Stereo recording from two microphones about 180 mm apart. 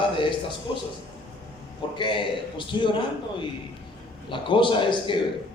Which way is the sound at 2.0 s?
25° left (ahead or behind).